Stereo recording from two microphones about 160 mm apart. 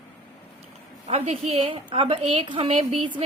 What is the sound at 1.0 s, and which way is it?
A woman's voice, 40° right (ahead or behind).